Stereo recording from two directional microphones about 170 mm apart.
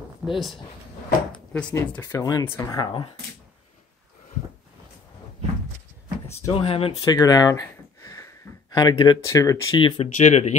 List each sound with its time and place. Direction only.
0.2 s speech: 10° right (ahead or behind)
1.5 s speech: 10° left (ahead or behind)
6.2 s a sound: 15° left (ahead or behind)
6.5 s speech: 35° left (ahead or behind)
10.0 s speech: 45° left (ahead or behind)